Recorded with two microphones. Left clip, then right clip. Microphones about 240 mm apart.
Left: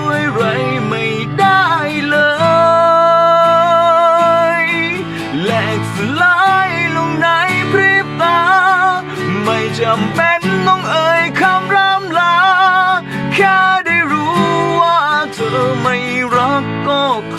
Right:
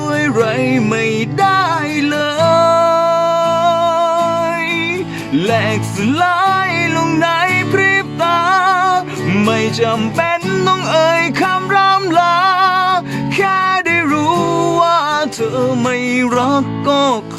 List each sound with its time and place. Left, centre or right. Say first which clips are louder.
1.4 s music: left 3 dB; right
6.1 s music: left 3 dB; right